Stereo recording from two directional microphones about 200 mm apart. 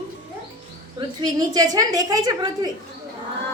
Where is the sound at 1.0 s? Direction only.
20° right (ahead or behind).